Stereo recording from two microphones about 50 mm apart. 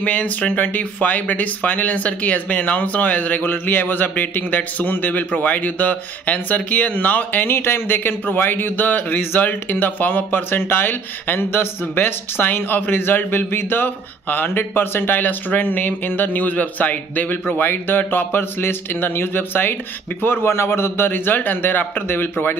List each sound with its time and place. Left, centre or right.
0.0 s speech: left
7.4 s a man's voice: left